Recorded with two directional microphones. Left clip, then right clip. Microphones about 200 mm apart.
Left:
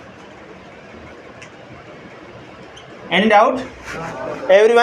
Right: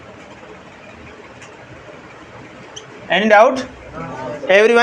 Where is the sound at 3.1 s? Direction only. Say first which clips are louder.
Right 2 dB; 50° right (ahead or behind).